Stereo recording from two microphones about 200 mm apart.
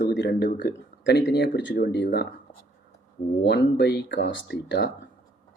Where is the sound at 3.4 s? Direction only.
60° left (ahead or behind).